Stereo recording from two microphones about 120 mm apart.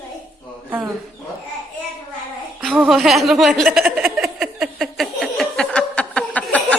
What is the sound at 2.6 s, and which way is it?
A woman's voice, centre (ahead or behind).